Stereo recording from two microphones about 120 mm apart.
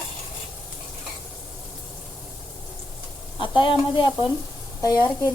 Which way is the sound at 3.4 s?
45° left (ahead or behind).